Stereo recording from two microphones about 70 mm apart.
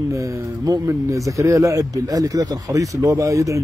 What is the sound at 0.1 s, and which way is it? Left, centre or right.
Speech, right.